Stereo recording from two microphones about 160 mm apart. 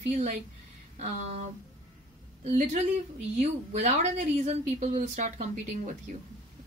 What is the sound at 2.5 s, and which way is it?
Speech, 45° right (ahead or behind).